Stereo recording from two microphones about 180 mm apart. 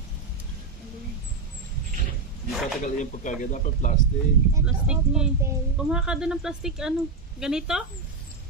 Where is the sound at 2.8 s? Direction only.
45° left (ahead or behind).